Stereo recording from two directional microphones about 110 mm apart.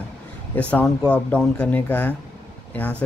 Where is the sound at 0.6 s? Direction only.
10° left (ahead or behind).